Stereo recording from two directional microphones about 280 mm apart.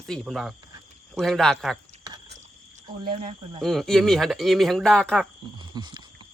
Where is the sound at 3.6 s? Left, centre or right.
Centre.